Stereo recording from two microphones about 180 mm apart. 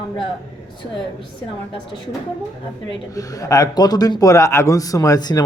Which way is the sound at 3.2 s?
20° left (ahead or behind).